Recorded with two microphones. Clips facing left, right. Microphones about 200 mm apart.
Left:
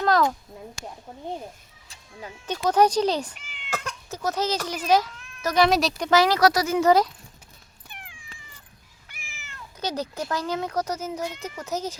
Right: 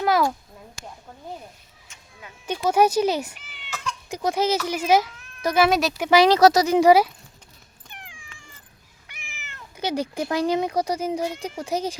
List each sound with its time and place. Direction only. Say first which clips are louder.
0.0 s a sound: even; 10° right (ahead or behind)
2.5 s speech: right 1 dB; 10° right (ahead or behind)
6.1 s speech: right 4 dB; 20° right (ahead or behind)
9.2 s cat: right 2 dB; 65° right (ahead or behind)
9.7 s speech: right 4 dB; 10° right (ahead or behind)